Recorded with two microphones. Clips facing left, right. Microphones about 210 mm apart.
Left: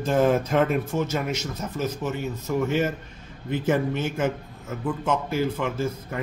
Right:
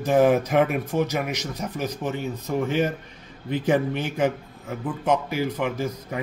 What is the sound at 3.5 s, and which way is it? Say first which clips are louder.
A man's voice: right 1 dB; 15° right (ahead or behind).